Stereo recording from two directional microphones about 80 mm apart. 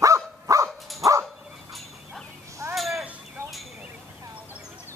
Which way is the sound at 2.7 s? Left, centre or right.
Centre.